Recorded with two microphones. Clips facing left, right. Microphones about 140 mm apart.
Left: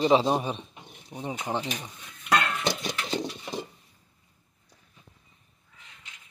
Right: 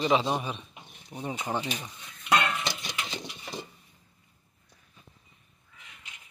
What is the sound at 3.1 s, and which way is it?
Horse, 40° left (ahead or behind).